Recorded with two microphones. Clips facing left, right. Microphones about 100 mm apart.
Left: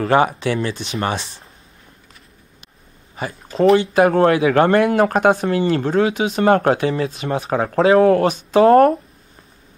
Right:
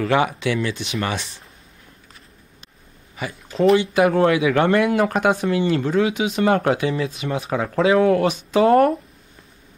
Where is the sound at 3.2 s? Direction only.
40° left (ahead or behind).